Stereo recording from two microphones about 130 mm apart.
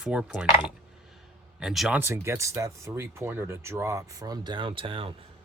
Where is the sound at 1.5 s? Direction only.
Centre (ahead or behind).